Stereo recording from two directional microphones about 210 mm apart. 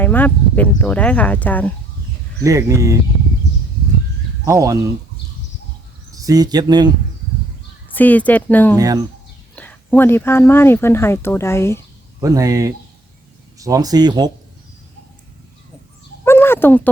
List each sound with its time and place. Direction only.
0.0 s speech: 10° left (ahead or behind)
2.4 s speech: 15° right (ahead or behind)
4.4 s speech: 15° right (ahead or behind)
6.1 s speech: 15° right (ahead or behind)
7.9 s speech: 5° left (ahead or behind)
8.7 s speech: 15° right (ahead or behind)
9.6 s speech: 10° left (ahead or behind)
12.2 s speech: 15° right (ahead or behind)
16.2 s a sound: 10° left (ahead or behind)